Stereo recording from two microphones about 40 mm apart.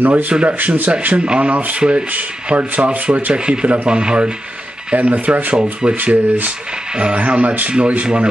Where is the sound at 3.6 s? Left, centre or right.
Right.